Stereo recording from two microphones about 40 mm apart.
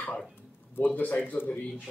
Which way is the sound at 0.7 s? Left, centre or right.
Left.